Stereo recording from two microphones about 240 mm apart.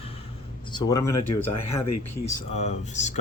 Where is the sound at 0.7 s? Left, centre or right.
Centre.